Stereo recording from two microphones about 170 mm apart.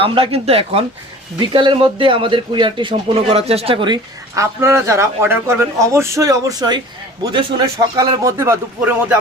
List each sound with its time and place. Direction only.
0.0 s speech: 35° right (ahead or behind)
4.6 s a man's voice: 15° right (ahead or behind)
7.9 s a man's voice: 25° right (ahead or behind)